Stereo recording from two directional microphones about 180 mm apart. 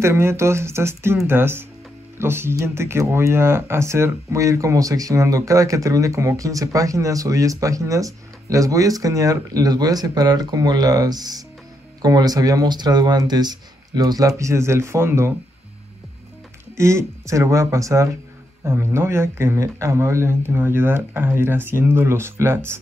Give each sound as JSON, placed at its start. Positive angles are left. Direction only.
{"t": 0.0, "sound": "speech", "side_deg": -15}
{"t": 16.7, "sound": "speech", "side_deg": -15}